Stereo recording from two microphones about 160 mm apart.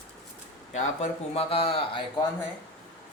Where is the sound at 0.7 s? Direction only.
40° left (ahead or behind).